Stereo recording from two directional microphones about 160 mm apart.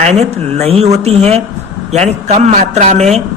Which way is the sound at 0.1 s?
40° right (ahead or behind).